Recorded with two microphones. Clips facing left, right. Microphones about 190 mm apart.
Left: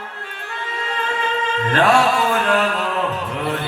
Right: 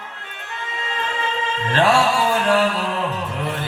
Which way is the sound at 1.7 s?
25° right (ahead or behind).